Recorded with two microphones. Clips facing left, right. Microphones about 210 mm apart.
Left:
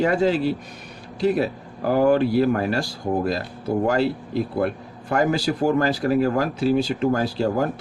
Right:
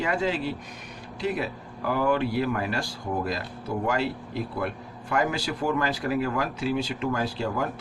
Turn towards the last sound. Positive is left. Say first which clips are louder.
# left 6 dB
turn(degrees=40)  # may be behind; listen again after turning